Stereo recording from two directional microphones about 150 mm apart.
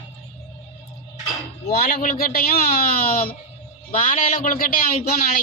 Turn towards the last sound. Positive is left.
turn(degrees=75)  # may be behind; listen again after turning